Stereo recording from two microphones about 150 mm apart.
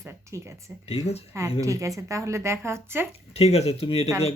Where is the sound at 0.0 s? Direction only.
20° right (ahead or behind).